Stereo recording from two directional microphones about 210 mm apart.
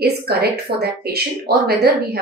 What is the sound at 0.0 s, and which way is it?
A woman's voice, 50° right (ahead or behind).